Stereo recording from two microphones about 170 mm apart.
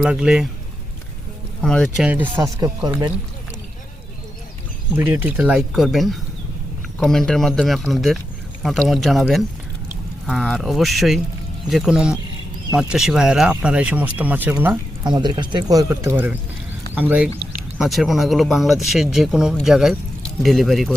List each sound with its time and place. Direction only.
0.0 s speech: 5° right (ahead or behind)
1.6 s speech: 5° left (ahead or behind)
2.0 s speech: 10° right (ahead or behind)
2.3 s speech: 20° right (ahead or behind)
4.9 s speech: 10° right (ahead or behind)
15.0 s speech: 25° right (ahead or behind); by 20.9 s centre (ahead or behind)